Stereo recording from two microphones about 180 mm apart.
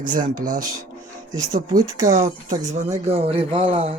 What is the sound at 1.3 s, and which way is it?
Speech, 20° right (ahead or behind).